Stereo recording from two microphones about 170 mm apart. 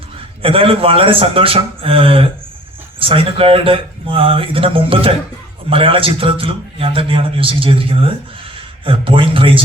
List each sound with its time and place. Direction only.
0.4 s a man's voice: 35° right (ahead or behind)